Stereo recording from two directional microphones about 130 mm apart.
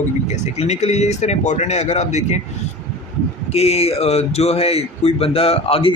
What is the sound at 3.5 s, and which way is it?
Speech, 50° left (ahead or behind).